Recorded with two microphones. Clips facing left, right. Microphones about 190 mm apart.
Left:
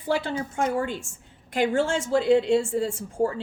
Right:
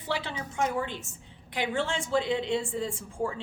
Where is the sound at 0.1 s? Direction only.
45° left (ahead or behind).